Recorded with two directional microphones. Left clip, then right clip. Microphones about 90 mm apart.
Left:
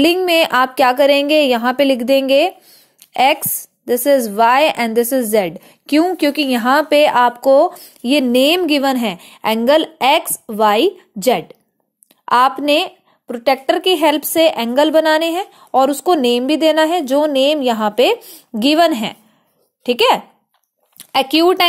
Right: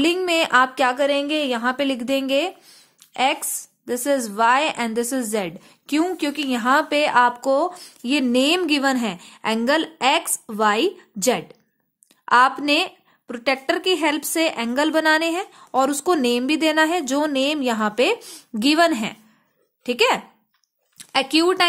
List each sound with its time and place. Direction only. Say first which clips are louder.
0.0 s a woman's voice: left 7 dB; 35° left (ahead or behind)
4.5 s a woman's voice: left 5 dB; 40° left (ahead or behind)
5.0 s a woman's voice: left 9 dB; 25° left (ahead or behind)
12.3 s a woman's voice: left 4 dB; 20° left (ahead or behind)